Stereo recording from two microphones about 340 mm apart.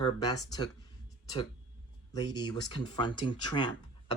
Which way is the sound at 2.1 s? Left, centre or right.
Centre.